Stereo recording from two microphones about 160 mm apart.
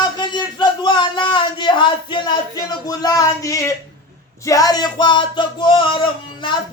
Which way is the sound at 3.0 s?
25° left (ahead or behind).